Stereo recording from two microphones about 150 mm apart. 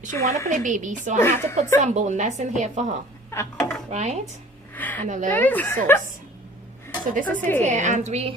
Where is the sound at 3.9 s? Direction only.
50° right (ahead or behind).